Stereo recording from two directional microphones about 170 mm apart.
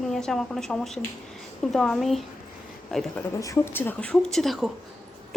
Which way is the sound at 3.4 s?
15° left (ahead or behind).